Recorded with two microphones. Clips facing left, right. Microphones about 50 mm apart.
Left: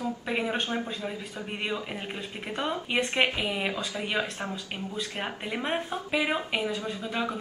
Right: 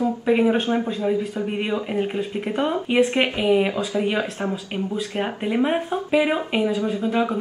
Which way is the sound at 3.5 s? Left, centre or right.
Centre.